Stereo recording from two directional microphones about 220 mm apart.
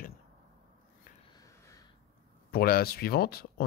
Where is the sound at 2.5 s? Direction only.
45° left (ahead or behind).